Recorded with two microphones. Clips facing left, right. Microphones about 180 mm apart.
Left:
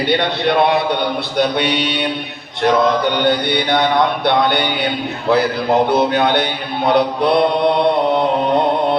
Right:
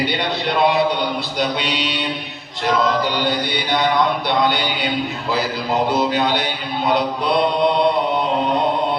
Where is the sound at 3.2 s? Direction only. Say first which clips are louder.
Left 5 dB; 60° left (ahead or behind).